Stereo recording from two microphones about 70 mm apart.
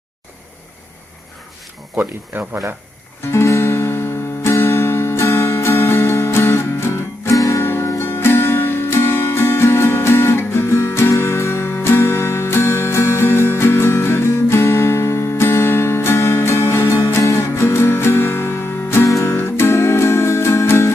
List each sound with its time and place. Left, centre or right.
2.0 s speech: right
3.3 s music: left
6.9 s music: left
7.6 s music: left